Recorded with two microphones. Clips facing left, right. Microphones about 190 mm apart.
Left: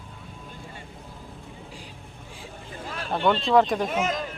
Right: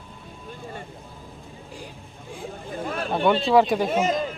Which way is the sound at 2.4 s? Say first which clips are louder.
Right 8 dB; 55° right (ahead or behind).